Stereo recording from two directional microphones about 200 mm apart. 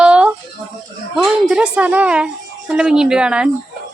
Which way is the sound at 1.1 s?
Centre (ahead or behind).